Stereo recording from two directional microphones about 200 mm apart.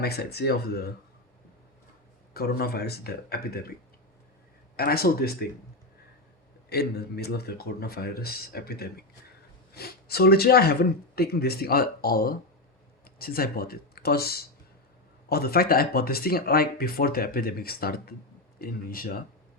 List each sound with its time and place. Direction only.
0.0 s speech: 50° left (ahead or behind)
2.3 s speech: 50° left (ahead or behind)
4.8 s speech: 50° left (ahead or behind)
6.7 s speech: 55° left (ahead or behind)